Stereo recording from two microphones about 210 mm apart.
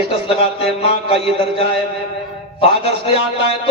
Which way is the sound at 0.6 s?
25° left (ahead or behind).